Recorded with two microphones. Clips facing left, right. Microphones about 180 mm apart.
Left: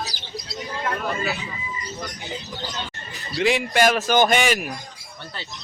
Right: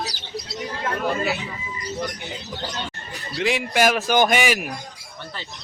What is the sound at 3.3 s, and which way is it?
Speech, centre (ahead or behind).